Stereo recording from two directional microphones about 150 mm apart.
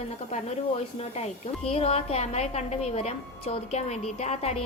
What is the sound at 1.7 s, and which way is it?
A woman's voice, 40° left (ahead or behind).